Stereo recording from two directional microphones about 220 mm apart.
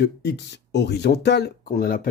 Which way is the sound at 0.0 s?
50° left (ahead or behind).